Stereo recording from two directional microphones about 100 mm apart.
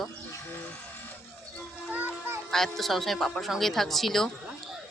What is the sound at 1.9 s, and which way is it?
Music, 20° right (ahead or behind).